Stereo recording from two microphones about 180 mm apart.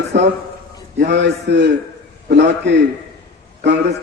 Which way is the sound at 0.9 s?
75° right (ahead or behind).